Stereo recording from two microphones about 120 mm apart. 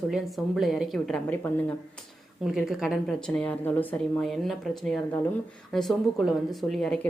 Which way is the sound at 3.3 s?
15° left (ahead or behind).